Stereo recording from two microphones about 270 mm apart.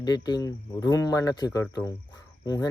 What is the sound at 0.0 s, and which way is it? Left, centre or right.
Speech, centre.